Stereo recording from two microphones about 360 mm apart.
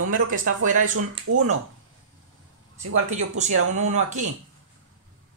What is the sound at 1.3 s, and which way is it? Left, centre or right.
Speech, right.